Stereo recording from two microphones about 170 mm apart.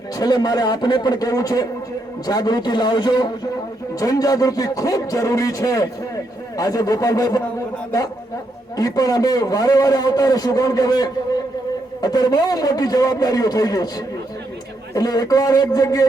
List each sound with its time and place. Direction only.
0.2 s a man's voice: 25° left (ahead or behind)
8.7 s a man's voice: 20° left (ahead or behind)
14.9 s a man's voice: 20° left (ahead or behind)